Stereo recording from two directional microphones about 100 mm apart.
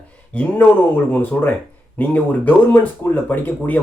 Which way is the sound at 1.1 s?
20° left (ahead or behind).